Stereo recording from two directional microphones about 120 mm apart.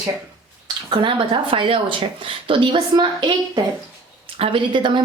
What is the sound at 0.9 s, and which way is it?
A woman's voice, 45° right (ahead or behind).